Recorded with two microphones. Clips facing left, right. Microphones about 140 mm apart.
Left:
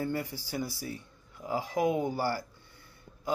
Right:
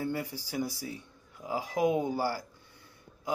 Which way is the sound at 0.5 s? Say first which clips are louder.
Right 1 dB; 15° right (ahead or behind).